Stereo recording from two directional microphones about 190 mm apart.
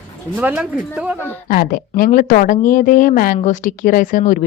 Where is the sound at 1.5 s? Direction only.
50° left (ahead or behind).